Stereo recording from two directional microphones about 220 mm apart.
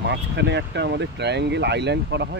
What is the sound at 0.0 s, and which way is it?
Speech, 50° right (ahead or behind).